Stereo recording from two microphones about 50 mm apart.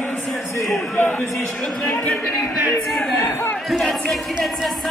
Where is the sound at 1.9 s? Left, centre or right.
Left.